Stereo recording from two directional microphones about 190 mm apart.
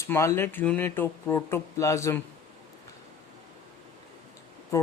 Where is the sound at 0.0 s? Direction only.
15° left (ahead or behind).